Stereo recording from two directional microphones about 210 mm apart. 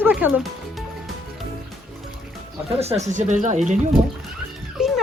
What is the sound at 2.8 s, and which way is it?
Speech, 30° right (ahead or behind).